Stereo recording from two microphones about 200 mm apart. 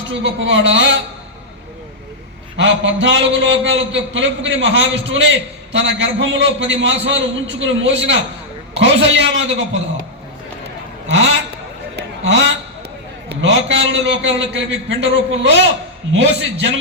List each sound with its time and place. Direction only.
0.1 s a man's voice: 65° right (ahead or behind)
2.6 s a man's voice: 70° right (ahead or behind)
11.1 s a man's voice: 75° right (ahead or behind)
11.9 s a sound: 70° right (ahead or behind)
13.2 s a man's voice: 65° right (ahead or behind)